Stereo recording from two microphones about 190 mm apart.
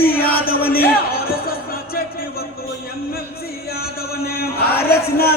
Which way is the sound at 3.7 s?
55° left (ahead or behind).